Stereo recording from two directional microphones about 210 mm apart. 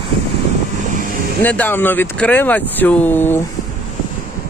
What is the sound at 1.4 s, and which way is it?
Speech, 10° left (ahead or behind).